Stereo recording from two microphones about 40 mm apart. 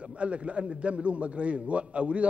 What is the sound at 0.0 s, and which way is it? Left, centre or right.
A man's voice, right.